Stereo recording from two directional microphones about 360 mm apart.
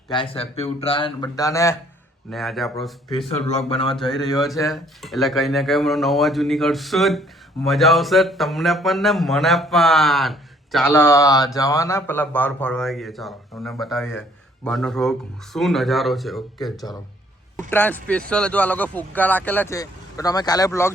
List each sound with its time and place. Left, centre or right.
0.1 s speech: centre
3.2 s speech: centre